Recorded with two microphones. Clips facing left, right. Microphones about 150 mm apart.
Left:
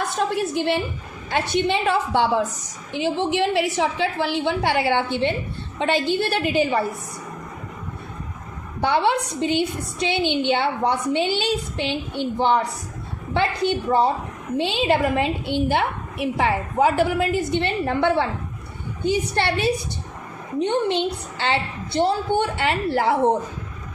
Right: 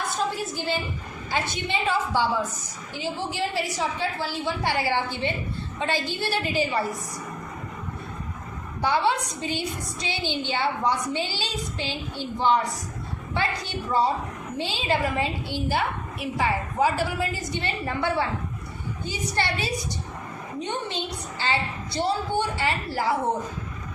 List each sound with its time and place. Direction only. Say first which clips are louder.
0.2 s a woman's voice: left 9 dB; 65° left (ahead or behind)
5.8 s a woman's voice: left 7 dB; 60° left (ahead or behind)
8.8 s a woman's voice: left 3 dB; 60° left (ahead or behind)